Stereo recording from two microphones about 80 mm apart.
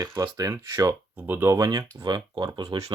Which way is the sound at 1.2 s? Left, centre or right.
Right.